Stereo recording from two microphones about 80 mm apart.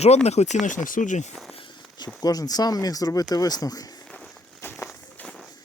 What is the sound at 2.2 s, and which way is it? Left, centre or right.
Speech, left.